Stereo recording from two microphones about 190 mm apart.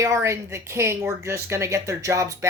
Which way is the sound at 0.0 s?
15° right (ahead or behind).